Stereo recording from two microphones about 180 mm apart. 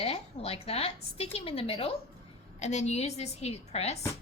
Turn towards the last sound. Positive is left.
turn(degrees=35)  # may be behind; listen again after turning